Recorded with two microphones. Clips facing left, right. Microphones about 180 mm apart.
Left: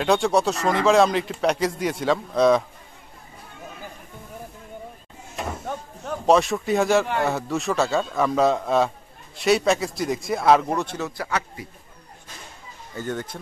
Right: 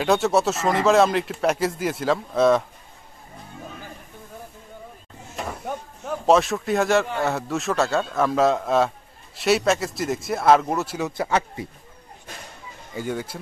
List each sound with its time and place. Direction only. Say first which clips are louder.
0.0 s speech: even; 5° right (ahead or behind)
5.7 s a sound: right 3 dB; 15° right (ahead or behind)
6.0 s speech: even; centre (ahead or behind)
11.1 s a man's voice: right 4 dB; 25° right (ahead or behind)
12.9 s speech: right 1 dB; 10° right (ahead or behind)